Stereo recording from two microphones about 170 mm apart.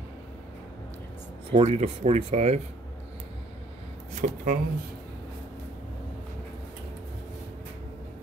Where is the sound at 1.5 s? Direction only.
40° right (ahead or behind).